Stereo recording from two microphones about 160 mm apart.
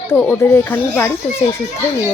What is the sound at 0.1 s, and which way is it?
Speech, 15° left (ahead or behind).